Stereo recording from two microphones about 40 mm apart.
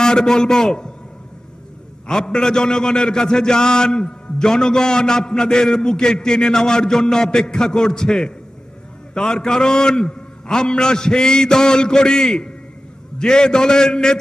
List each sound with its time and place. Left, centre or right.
0.0 s a man's voice: centre
2.0 s a man's voice: centre